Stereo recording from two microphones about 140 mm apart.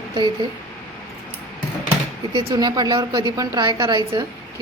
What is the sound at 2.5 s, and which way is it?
A woman's voice, 30° right (ahead or behind).